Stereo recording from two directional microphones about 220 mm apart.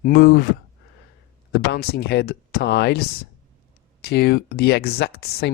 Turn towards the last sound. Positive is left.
turn(degrees=45)  # may be behind; listen again after turning